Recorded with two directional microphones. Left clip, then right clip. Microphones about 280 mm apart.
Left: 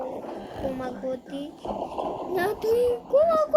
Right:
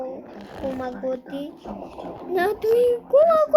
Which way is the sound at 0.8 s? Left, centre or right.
Centre.